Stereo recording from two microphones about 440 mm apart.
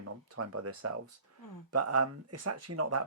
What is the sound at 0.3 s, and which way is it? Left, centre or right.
Speech, right.